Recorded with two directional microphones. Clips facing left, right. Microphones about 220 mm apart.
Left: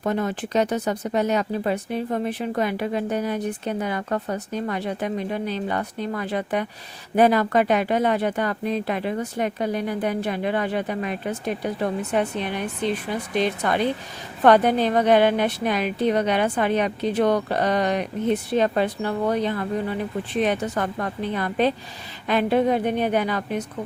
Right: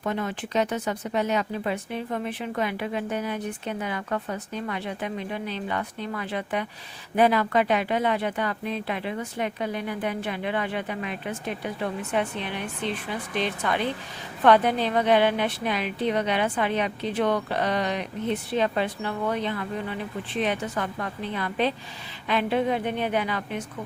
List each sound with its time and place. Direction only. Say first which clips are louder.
0.0 s a woman's voice: left 4 dB; 40° left (ahead or behind)